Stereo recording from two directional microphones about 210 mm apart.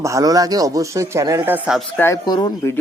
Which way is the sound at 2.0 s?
15° left (ahead or behind).